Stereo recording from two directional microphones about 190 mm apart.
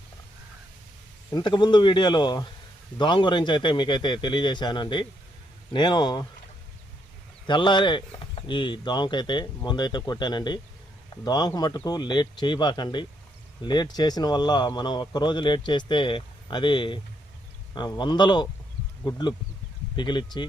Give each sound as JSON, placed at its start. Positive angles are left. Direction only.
{"t": 1.3, "sound": "a man's voice", "side_deg": 25}
{"t": 7.4, "sound": "a man's voice", "side_deg": 25}
{"t": 20.0, "sound": "a man's voice", "side_deg": 25}